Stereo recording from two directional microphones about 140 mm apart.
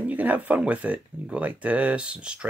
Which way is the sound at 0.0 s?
10° right (ahead or behind).